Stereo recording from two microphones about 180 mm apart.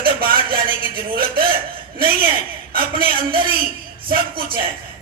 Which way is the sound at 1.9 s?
55° right (ahead or behind).